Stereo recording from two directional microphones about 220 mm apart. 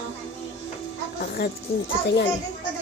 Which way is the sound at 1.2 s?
45° left (ahead or behind).